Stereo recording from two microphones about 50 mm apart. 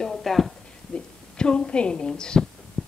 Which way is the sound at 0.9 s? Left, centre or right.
Centre.